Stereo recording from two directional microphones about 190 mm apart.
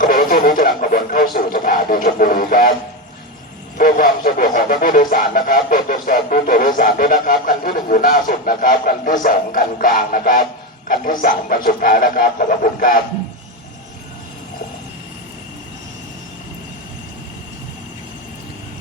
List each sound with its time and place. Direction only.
0.0 s speech: 45° left (ahead or behind)
3.8 s speech: 45° left (ahead or behind)